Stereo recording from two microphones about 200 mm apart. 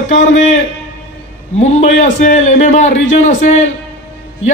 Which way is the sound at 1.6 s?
35° left (ahead or behind).